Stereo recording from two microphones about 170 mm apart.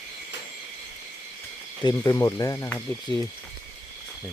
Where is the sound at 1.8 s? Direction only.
20° left (ahead or behind).